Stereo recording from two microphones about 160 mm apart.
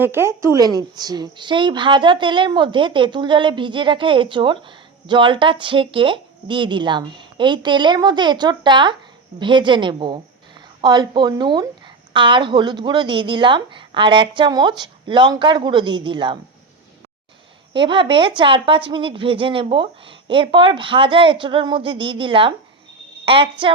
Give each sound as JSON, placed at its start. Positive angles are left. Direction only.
{"t": 0.0, "sound": "a woman's voice", "side_deg": -15}
{"t": 17.7, "sound": "speech", "side_deg": -30}